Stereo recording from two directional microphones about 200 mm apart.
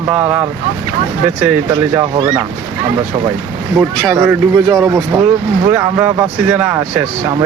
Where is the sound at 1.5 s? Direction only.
15° right (ahead or behind).